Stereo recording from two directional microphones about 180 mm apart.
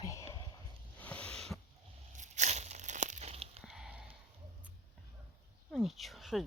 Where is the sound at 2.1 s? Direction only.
40° right (ahead or behind).